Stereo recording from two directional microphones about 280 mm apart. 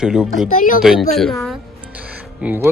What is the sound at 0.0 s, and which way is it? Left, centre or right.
Speech, centre.